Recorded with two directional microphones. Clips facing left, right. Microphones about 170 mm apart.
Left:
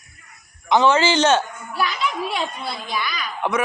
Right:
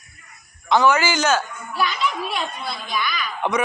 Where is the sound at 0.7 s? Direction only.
25° left (ahead or behind).